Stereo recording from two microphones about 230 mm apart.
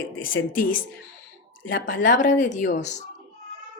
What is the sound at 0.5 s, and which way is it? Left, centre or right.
A woman's voice, left.